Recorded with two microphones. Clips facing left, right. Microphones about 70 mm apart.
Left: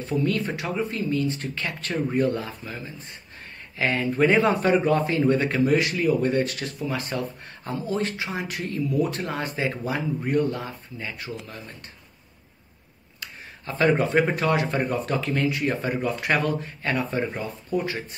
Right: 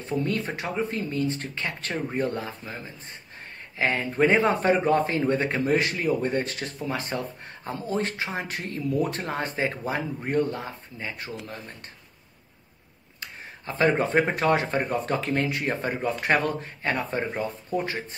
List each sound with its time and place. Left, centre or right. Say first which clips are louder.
0.0 s speech: left 2 dB; right
13.7 s speech: left 1 dB; right